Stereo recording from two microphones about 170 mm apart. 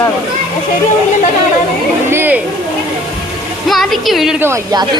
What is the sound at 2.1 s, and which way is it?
Speech, 10° right (ahead or behind).